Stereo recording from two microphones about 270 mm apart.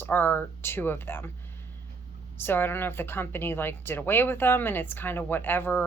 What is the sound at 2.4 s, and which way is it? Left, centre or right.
Speech, centre.